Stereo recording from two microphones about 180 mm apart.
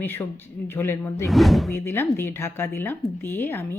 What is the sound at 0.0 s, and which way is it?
Speech, 10° left (ahead or behind).